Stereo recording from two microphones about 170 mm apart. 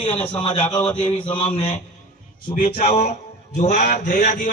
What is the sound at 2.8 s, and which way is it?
A man's voice, 40° left (ahead or behind).